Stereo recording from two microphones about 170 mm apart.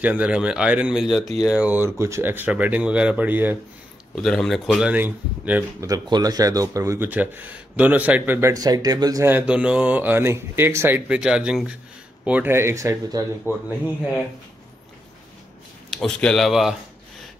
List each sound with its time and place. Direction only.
0.0 s speech: 10° right (ahead or behind)
4.1 s speech: 5° left (ahead or behind)
5.9 s speech: 25° right (ahead or behind)
9.3 s speech: 5° right (ahead or behind)
16.0 s speech: 5° left (ahead or behind)